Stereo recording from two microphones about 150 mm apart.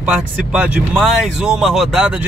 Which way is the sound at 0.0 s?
10° right (ahead or behind).